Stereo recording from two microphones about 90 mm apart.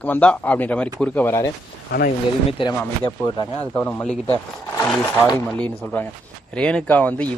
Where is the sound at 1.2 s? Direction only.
30° left (ahead or behind).